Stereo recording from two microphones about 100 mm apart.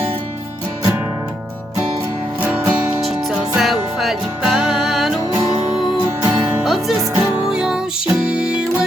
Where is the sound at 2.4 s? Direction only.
20° right (ahead or behind).